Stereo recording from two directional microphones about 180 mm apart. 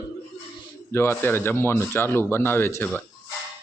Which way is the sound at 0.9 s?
15° left (ahead or behind).